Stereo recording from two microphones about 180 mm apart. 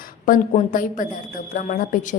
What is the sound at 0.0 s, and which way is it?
A woman's voice, 50° left (ahead or behind).